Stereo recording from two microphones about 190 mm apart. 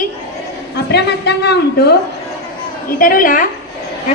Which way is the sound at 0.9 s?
60° left (ahead or behind).